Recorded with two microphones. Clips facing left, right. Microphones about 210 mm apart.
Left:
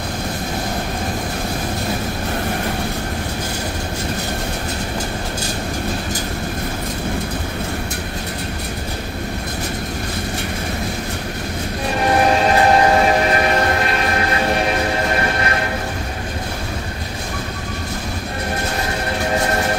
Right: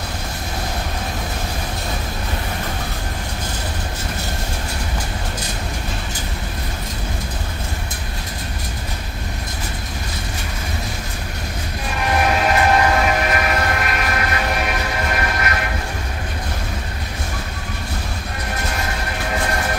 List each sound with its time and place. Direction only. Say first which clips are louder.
12.0 s train: left 3 dB; 30° left (ahead or behind)